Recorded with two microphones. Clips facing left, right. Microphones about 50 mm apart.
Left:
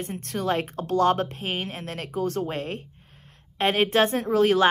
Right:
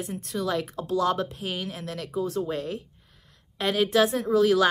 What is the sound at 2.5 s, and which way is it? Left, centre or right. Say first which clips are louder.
A woman's voice: even; left.